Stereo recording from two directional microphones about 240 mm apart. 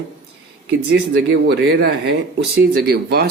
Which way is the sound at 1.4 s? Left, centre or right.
Right.